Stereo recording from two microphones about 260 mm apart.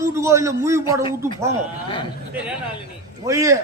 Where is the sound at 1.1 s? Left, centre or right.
Centre.